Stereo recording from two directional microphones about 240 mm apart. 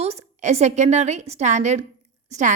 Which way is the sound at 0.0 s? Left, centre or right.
Right.